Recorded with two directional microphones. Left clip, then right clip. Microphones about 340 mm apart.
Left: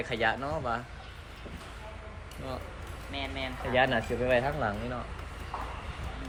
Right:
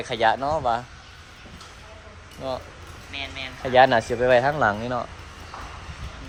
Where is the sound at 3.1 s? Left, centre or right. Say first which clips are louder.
Right 3 dB; centre.